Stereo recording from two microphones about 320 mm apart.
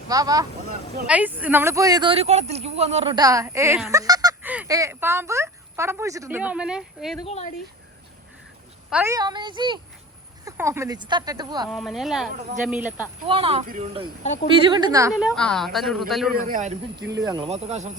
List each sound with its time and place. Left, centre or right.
0.1 s speech: centre
7.2 s speech: centre
8.9 s speech: centre
11.7 s a woman's voice: centre
13.2 s a woman's voice: centre
16.5 s speech: right